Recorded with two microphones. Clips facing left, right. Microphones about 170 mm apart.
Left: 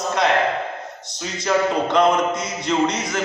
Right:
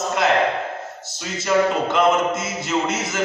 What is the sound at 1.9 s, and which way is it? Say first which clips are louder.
A man's voice: left 1 dB; 5° right (ahead or behind).